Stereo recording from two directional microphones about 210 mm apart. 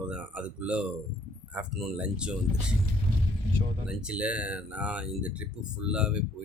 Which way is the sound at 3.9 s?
5° right (ahead or behind).